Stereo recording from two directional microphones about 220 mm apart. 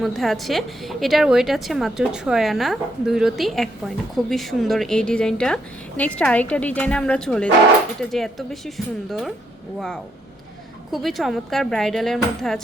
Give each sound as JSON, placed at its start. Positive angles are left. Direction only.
{"t": 0.0, "sound": "a woman's voice", "side_deg": 0}
{"t": 10.9, "sound": "a woman's voice", "side_deg": 0}